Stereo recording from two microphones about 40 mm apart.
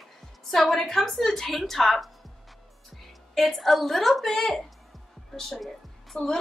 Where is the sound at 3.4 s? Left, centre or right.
Centre.